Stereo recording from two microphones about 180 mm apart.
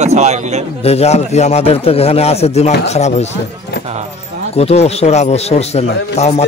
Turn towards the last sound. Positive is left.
turn(degrees=35)  # may be behind; listen again after turning